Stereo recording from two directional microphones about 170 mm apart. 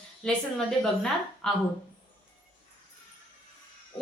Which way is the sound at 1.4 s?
5° left (ahead or behind).